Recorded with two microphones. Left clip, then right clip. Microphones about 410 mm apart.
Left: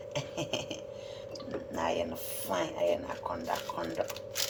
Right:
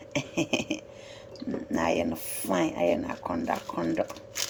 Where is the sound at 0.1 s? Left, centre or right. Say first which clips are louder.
Right 7 dB; right.